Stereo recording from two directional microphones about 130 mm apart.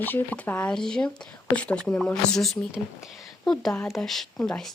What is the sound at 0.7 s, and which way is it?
Speech, 5° left (ahead or behind).